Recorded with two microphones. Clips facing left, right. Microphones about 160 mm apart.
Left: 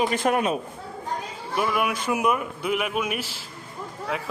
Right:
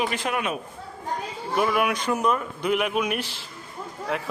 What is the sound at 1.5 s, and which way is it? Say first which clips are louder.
Speech: right 2 dB; centre (ahead or behind).